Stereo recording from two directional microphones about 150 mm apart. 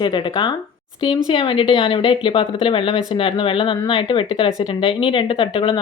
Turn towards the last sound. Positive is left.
turn(degrees=35)  # may be behind; listen again after turning